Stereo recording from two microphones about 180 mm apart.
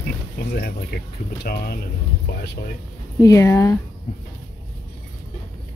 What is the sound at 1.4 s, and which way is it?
Speech, 60° left (ahead or behind).